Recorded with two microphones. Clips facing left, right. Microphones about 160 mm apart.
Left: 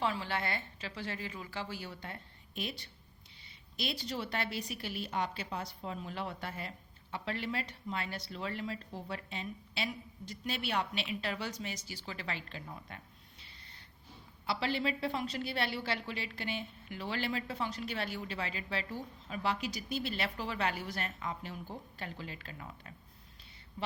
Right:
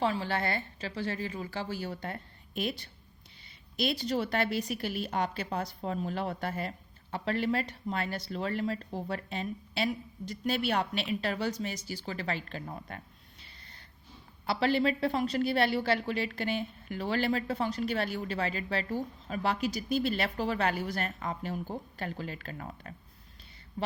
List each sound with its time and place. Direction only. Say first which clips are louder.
0.0 s a woman's voice: right 5 dB; 35° right (ahead or behind)
14.4 s a woman's voice: right 7 dB; 50° right (ahead or behind)